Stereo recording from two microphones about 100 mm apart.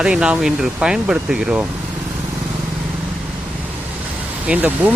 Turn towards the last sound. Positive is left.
turn(degrees=-15)  # may be behind; listen again after turning